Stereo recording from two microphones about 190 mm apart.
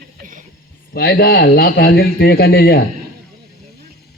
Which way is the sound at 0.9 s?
55° left (ahead or behind).